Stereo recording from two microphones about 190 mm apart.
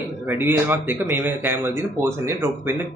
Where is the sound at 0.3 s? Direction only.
10° right (ahead or behind).